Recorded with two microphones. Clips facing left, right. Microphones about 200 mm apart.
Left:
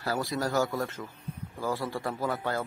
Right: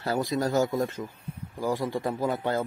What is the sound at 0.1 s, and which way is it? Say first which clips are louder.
Speech: right 4 dB; 15° right (ahead or behind).